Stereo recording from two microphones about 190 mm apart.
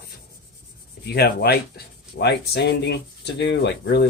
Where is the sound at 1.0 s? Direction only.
55° left (ahead or behind).